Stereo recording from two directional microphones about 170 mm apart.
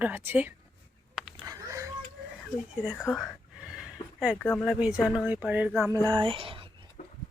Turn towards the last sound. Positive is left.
turn(degrees=-30)  # may be behind; listen again after turning